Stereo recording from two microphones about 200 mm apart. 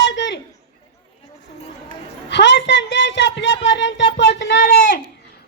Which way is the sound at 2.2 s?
60° left (ahead or behind).